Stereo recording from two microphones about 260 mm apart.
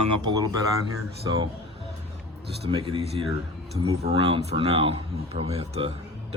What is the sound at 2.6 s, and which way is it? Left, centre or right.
Speech, centre.